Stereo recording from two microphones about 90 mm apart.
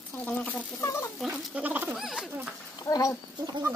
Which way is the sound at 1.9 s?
5° right (ahead or behind).